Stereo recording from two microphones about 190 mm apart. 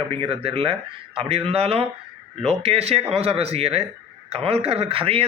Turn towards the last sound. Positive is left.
turn(degrees=-30)  # may be behind; listen again after turning